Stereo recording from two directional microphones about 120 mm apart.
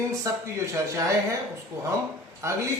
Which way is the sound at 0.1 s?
25° right (ahead or behind).